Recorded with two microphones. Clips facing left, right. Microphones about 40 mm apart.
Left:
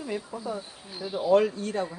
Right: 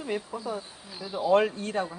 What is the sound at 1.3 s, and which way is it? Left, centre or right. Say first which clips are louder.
Speech: left 1 dB; right.